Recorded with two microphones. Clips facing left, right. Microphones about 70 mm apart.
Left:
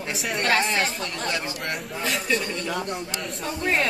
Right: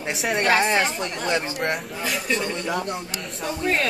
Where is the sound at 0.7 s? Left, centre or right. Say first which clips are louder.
Right 3 dB; centre.